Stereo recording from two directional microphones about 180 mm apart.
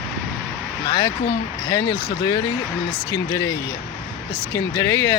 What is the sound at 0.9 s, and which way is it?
Speech, 20° left (ahead or behind).